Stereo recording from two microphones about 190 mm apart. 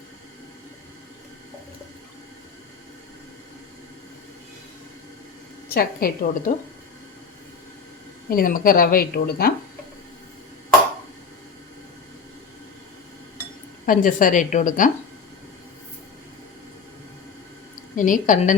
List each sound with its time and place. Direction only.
5.6 s a woman's voice: 50° left (ahead or behind)
8.3 s a woman's voice: 50° left (ahead or behind)
13.8 s a woman's voice: 45° left (ahead or behind)
17.9 s a woman's voice: 45° left (ahead or behind)